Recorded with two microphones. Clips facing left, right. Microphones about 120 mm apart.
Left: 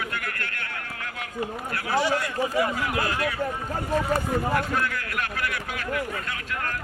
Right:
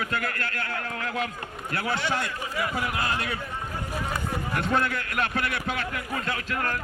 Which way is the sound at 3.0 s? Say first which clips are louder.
Left 2 dB; 25° right (ahead or behind).